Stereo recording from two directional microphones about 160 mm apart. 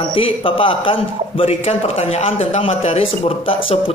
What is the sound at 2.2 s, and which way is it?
Speech, 40° left (ahead or behind).